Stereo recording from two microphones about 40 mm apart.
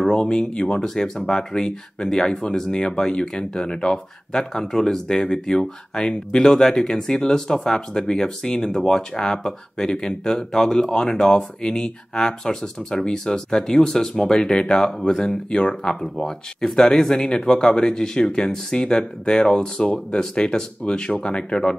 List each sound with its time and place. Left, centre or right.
0.2 s speech: left
1.0 s speech: centre